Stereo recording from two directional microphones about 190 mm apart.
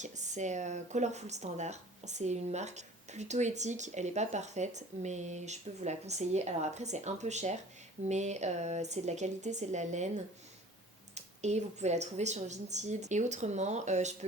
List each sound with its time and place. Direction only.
0.0 s speech: 40° right (ahead or behind)
11.1 s speech: 35° right (ahead or behind)